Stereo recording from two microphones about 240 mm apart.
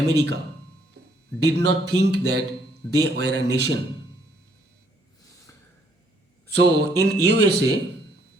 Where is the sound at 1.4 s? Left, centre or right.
Right.